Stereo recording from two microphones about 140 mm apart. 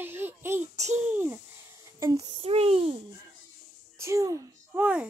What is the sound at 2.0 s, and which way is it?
Female singing, 25° right (ahead or behind).